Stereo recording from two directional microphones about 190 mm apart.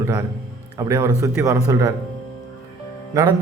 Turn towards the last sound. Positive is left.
turn(degrees=-15)  # may be behind; listen again after turning